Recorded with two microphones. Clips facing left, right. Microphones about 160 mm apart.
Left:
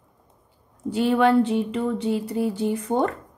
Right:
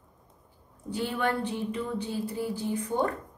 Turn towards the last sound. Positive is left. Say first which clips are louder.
# left 6 dB
turn(degrees=80)